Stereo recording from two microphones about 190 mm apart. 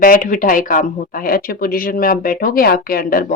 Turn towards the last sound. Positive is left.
turn(degrees=50)  # may be behind; listen again after turning